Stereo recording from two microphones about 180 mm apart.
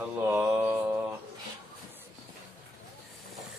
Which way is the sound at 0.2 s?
15° right (ahead or behind).